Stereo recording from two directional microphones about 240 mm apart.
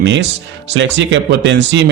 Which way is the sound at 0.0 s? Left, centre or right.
Right.